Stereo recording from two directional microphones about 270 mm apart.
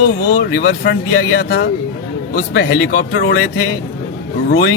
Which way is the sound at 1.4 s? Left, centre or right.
Left.